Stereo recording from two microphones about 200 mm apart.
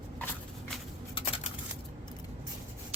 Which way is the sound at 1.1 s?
30° left (ahead or behind).